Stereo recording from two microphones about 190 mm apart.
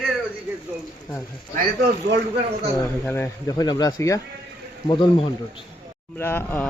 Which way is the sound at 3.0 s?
10° left (ahead or behind).